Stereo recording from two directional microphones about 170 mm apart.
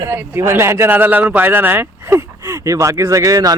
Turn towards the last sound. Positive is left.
turn(degrees=-20)  # may be behind; listen again after turning